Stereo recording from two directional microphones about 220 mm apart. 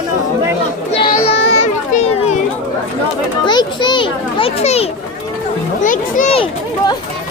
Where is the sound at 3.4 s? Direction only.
20° left (ahead or behind).